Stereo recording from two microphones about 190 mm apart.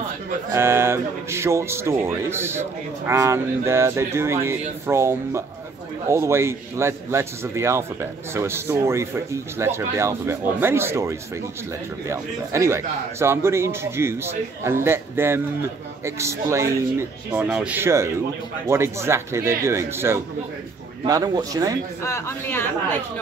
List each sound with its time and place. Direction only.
0.5 s a man's voice: 15° right (ahead or behind)
22.0 s speech: 15° left (ahead or behind)